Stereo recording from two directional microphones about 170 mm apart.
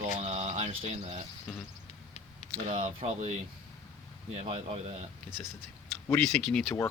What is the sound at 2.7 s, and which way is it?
Speech, 40° right (ahead or behind).